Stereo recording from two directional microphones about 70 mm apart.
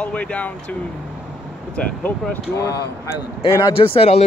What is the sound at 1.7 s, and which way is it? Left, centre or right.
Speech, left.